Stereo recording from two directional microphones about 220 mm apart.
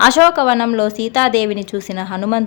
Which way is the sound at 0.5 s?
15° left (ahead or behind).